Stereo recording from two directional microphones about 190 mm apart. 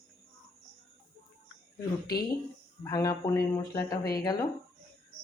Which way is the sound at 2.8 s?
20° left (ahead or behind).